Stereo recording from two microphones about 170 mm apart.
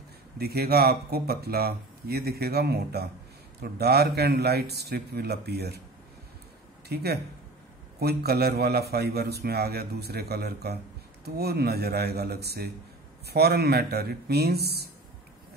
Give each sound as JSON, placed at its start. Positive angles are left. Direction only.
{"t": 0.4, "sound": "a man's voice", "side_deg": -65}
{"t": 6.9, "sound": "a man's voice", "side_deg": -70}